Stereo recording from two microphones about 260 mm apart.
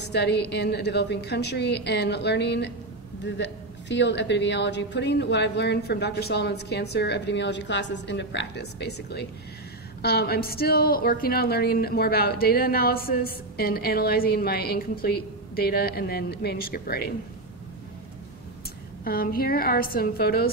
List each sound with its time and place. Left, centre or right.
0.1 s a woman's voice: left
19.0 s a woman's voice: left